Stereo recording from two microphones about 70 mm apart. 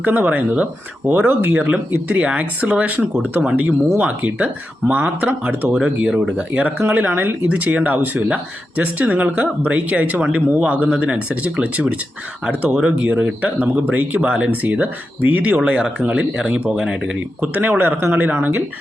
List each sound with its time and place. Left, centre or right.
0.0 s speech: right; by 6.1 s centre
6.3 s speech: right
7.4 s speech: centre